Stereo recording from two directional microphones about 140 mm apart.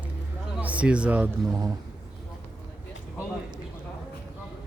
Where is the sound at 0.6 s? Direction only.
10° right (ahead or behind).